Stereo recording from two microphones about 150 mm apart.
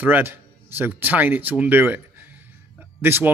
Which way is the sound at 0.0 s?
15° right (ahead or behind).